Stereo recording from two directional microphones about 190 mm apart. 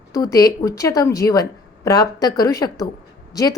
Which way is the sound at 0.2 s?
20° left (ahead or behind).